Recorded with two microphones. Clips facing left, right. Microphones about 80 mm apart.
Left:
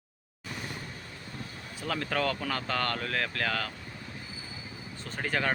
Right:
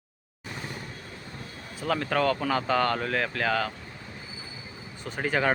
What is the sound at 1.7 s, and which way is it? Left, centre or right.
Speech, centre.